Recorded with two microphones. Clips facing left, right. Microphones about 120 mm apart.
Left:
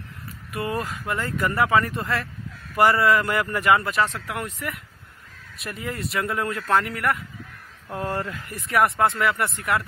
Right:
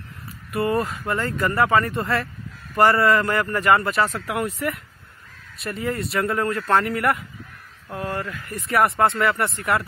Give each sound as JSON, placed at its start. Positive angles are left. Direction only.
{"t": 0.5, "sound": "speech", "side_deg": 0}
{"t": 7.9, "sound": "speech", "side_deg": 25}
{"t": 8.5, "sound": "speech", "side_deg": 0}